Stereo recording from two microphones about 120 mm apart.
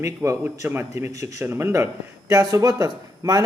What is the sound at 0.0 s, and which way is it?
Speech, 25° right (ahead or behind).